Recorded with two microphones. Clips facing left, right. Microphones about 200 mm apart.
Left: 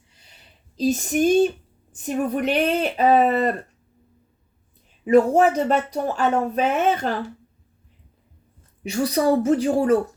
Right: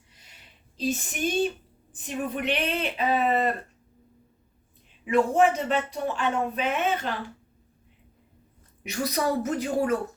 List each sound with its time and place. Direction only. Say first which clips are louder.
0.1 s a sound: left 2 dB; 30° left (ahead or behind)
1.9 s a woman's voice: left 7 dB; 40° left (ahead or behind)
5.0 s speech: left 6 dB; 40° left (ahead or behind)
8.8 s speech: left 6 dB; 30° left (ahead or behind)